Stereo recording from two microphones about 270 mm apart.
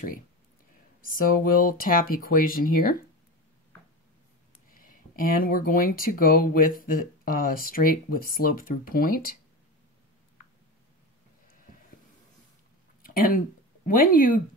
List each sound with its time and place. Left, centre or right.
1.0 s speech: left
4.7 s speech: left
13.0 s a sound: left
13.8 s speech: left